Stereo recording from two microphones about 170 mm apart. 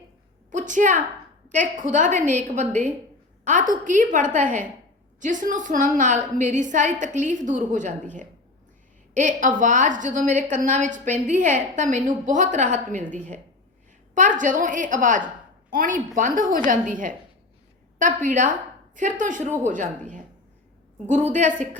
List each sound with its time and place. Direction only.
0.5 s a woman's voice: 50° right (ahead or behind)
9.1 s a woman's voice: 50° right (ahead or behind)